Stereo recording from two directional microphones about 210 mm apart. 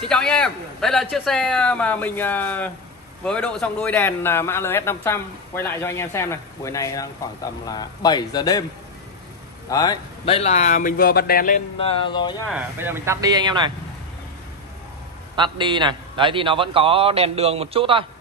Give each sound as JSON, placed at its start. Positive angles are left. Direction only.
{"t": 0.1, "sound": "a man's voice", "side_deg": 5}
{"t": 9.7, "sound": "a man's voice", "side_deg": 20}
{"t": 12.4, "sound": "speech", "side_deg": -5}
{"t": 15.3, "sound": "a man's voice", "side_deg": -20}